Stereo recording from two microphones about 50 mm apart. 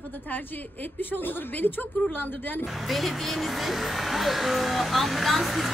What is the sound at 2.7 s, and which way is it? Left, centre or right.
Speech, centre.